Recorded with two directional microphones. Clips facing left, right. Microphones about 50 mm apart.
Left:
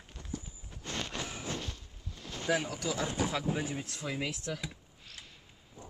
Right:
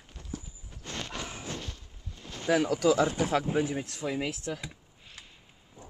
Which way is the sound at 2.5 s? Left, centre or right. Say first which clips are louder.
Right 8 dB; right.